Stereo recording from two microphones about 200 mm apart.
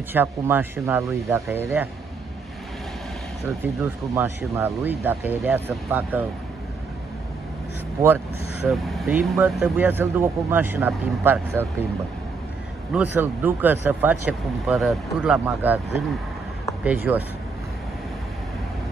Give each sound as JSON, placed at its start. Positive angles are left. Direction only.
{"t": 0.1, "sound": "speech", "side_deg": -10}
{"t": 3.4, "sound": "speech", "side_deg": -10}
{"t": 8.6, "sound": "speech", "side_deg": 0}
{"t": 12.9, "sound": "speech", "side_deg": -10}
{"t": 16.8, "sound": "speech", "side_deg": -10}